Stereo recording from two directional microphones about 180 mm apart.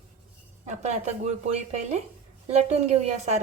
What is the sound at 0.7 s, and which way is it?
Speech, 40° right (ahead or behind).